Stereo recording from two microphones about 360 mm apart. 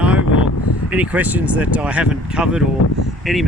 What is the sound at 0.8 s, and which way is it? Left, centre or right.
Speech, centre.